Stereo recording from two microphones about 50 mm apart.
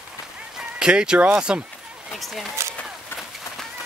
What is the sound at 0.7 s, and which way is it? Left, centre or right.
Speech, centre.